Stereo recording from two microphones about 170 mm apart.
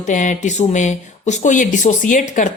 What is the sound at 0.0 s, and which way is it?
Speech, 45° left (ahead or behind).